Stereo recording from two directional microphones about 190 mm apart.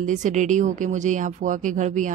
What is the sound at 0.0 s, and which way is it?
Speech, 40° right (ahead or behind).